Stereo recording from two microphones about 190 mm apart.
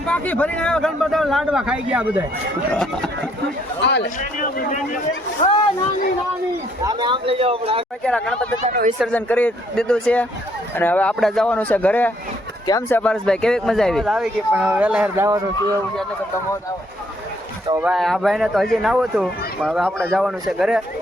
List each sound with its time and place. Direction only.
0.0 s speech: 5° left (ahead or behind)
3.8 s a man's voice: 65° left (ahead or behind)
4.2 s a man's voice: 45° left (ahead or behind)
6.8 s speech: 25° right (ahead or behind)
8.0 s speech: 5° left (ahead or behind)
12.6 s speech: 20° left (ahead or behind)
13.0 s speech: 5° left (ahead or behind); by 15.8 s 15° right (ahead or behind)
17.8 s speech: centre (ahead or behind)